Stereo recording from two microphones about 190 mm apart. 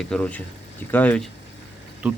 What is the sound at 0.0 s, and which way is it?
Speech, 5° left (ahead or behind).